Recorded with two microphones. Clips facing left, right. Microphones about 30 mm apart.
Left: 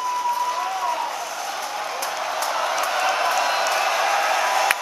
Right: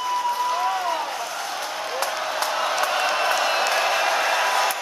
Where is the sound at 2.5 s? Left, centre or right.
Centre.